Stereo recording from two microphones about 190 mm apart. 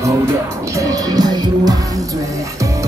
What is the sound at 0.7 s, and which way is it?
Music, 20° right (ahead or behind).